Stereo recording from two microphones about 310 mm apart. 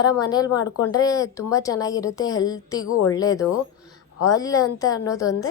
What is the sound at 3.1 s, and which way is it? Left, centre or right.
A woman's voice, centre.